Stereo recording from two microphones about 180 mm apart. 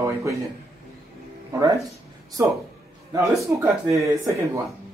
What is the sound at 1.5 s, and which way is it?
Music, 20° right (ahead or behind).